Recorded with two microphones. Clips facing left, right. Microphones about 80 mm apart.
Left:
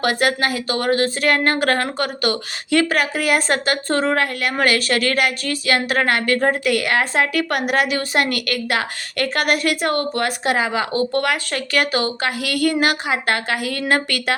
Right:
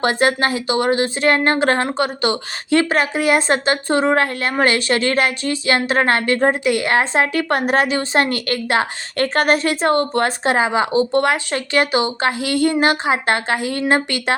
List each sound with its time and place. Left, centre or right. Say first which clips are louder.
0.0 s a woman's voice: right 2 dB; right